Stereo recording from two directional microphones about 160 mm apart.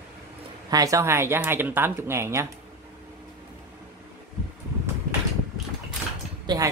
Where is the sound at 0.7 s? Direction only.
20° right (ahead or behind).